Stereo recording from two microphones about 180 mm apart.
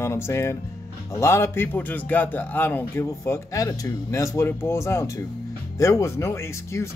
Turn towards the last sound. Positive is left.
turn(degrees=15)  # may be behind; listen again after turning